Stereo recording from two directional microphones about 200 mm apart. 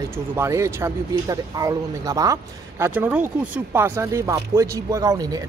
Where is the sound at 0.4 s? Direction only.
15° right (ahead or behind).